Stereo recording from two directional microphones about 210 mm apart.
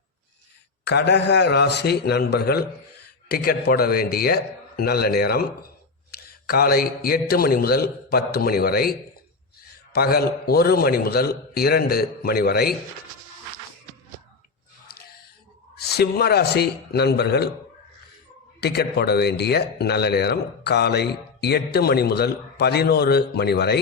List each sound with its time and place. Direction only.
0.9 s speech: 55° left (ahead or behind)
15.7 s speech: 50° left (ahead or behind)
18.6 s speech: 50° left (ahead or behind)